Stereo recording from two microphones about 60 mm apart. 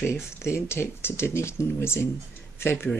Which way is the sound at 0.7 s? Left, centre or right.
Left.